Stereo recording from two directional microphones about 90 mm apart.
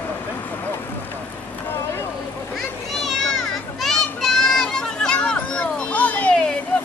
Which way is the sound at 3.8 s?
5° left (ahead or behind).